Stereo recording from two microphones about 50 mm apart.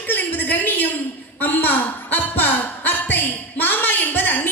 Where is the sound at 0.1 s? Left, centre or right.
Left.